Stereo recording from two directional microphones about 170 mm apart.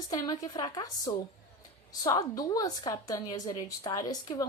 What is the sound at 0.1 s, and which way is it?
A woman's voice, 20° left (ahead or behind).